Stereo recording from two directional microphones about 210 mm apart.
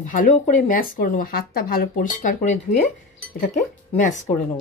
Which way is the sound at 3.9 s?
35° left (ahead or behind).